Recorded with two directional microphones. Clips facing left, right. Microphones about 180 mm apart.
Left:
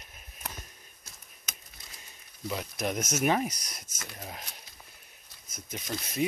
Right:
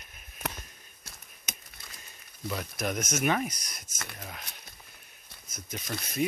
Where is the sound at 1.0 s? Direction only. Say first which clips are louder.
Right 4 dB; 65° right (ahead or behind).